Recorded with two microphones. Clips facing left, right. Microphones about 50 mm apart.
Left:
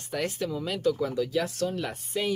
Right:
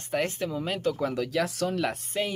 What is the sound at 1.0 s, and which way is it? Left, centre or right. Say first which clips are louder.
Speech: even; right.